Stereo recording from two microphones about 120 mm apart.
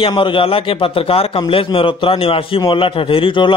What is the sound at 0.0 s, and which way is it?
A man's voice, 45° left (ahead or behind).